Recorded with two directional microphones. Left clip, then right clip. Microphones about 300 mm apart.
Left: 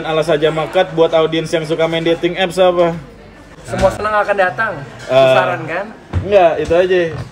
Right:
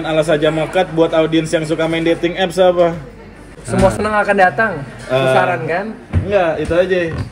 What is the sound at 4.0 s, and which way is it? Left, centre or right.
Speech, centre.